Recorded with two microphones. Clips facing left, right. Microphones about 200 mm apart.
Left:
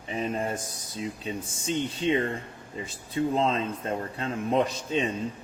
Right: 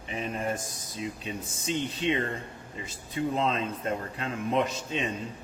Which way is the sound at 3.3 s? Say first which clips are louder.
Left 2 dB; 35° left (ahead or behind).